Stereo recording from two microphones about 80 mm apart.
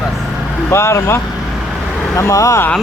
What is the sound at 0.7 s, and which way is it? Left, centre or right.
Speech, left.